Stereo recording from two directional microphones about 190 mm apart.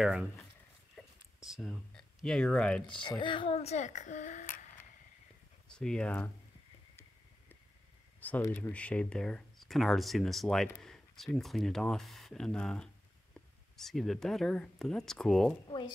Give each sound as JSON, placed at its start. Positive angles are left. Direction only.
{"t": 0.0, "sound": "speech", "side_deg": -5}
{"t": 0.9, "sound": "a sound", "side_deg": 0}
{"t": 3.0, "sound": "a woman's voice", "side_deg": 25}
{"t": 5.7, "sound": "speech", "side_deg": 5}
{"t": 8.2, "sound": "speech", "side_deg": 10}